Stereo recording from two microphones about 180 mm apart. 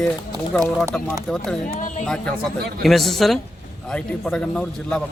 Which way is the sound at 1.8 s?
45° left (ahead or behind).